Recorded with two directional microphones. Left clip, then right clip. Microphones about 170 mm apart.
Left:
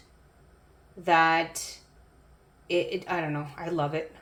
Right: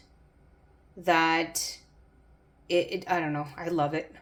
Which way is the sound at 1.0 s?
40° right (ahead or behind).